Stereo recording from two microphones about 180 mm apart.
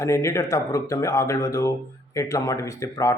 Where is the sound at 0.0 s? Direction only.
15° left (ahead or behind).